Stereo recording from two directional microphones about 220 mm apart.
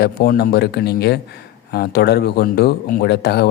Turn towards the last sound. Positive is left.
turn(degrees=50)  # may be behind; listen again after turning